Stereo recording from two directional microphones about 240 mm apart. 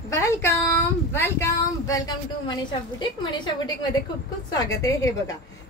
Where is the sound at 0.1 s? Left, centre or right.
Centre.